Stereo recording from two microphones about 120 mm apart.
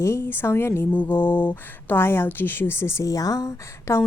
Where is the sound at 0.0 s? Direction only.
20° left (ahead or behind).